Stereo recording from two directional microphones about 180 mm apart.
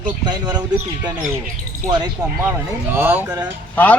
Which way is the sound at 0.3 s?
20° right (ahead or behind).